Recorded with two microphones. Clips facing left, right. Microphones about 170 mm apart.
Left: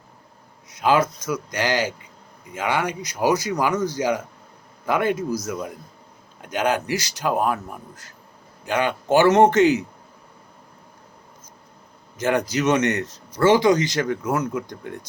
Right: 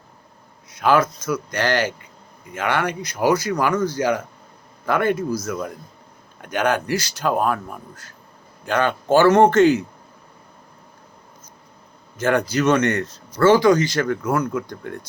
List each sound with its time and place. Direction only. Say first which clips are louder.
0.7 s speech: right 1 dB; 15° left (ahead or behind)
12.1 s a man's voice: right 2 dB; 15° left (ahead or behind)
12.8 s a man's voice: right 2 dB; 55° right (ahead or behind)
13.4 s speech: right 2 dB; 20° left (ahead or behind)